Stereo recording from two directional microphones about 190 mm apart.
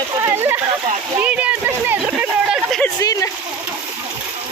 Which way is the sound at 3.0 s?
20° left (ahead or behind).